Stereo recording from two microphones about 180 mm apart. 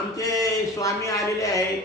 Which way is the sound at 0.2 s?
20° left (ahead or behind).